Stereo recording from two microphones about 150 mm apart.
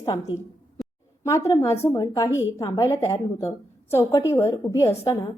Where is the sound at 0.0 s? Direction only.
25° left (ahead or behind).